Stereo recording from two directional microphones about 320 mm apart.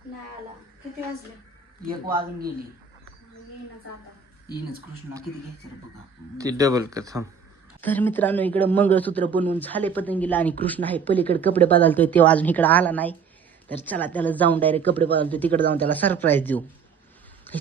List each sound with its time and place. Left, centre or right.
1.8 s speech: right
6.3 s speech: centre
7.8 s a man's voice: centre